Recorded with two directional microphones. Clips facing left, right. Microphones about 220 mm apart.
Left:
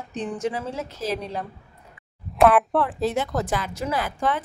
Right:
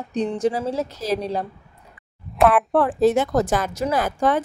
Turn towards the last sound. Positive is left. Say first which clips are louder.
# right 5 dB
turn(degrees=-45)  # may be behind; listen again after turning